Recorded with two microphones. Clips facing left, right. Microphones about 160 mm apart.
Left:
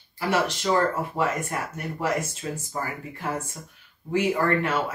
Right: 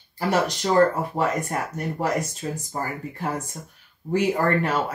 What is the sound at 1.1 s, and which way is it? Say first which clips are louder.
Speech: right 2 dB; 40° right (ahead or behind).